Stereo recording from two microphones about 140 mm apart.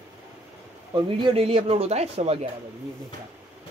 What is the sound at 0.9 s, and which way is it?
Speech, 35° right (ahead or behind).